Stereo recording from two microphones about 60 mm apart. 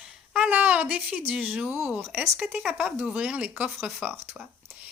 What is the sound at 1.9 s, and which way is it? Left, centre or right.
Speech, right.